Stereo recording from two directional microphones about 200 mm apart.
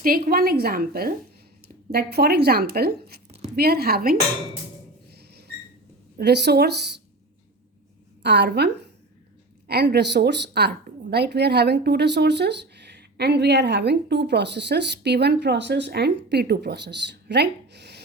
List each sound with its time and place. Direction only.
0.0 s speech: 50° right (ahead or behind)
5.1 s a sound: 55° right (ahead or behind)
6.1 s a woman's voice: 55° right (ahead or behind)
8.2 s a woman's voice: 60° right (ahead or behind)